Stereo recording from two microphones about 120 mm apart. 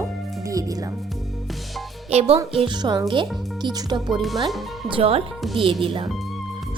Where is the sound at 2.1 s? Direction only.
60° right (ahead or behind).